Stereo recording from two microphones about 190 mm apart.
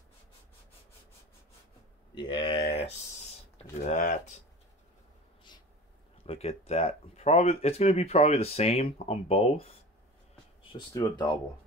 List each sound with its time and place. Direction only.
2.1 s speech: 25° left (ahead or behind)
3.5 s speech: 40° left (ahead or behind)
6.2 s speech: 30° left (ahead or behind)